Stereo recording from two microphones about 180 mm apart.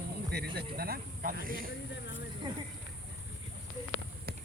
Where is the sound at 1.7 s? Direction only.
90° left.